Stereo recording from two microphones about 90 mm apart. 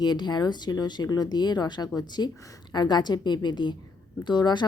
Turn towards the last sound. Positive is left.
turn(degrees=55)  # may be behind; listen again after turning